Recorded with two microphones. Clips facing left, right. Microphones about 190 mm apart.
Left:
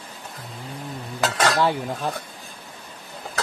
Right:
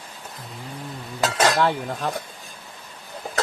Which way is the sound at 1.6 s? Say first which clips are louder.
Even; 10° left (ahead or behind).